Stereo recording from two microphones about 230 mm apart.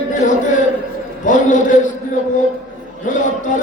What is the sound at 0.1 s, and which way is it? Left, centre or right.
A man's voice, left.